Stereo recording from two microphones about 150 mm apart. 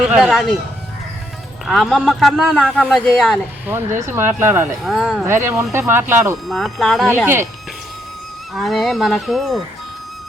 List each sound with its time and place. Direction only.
0.1 s a man's voice: centre (ahead or behind)
1.6 s a man's voice: centre (ahead or behind)
3.7 s speech: 15° right (ahead or behind)
4.7 s a man's voice: centre (ahead or behind)
5.2 s speech: 15° right (ahead or behind)
6.5 s a man's voice: centre (ahead or behind)
8.5 s a man's voice: centre (ahead or behind)